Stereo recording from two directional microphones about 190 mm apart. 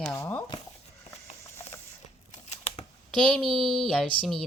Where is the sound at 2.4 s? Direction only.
35° left (ahead or behind).